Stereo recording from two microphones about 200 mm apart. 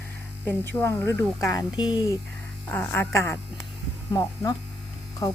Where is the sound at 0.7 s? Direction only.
15° left (ahead or behind).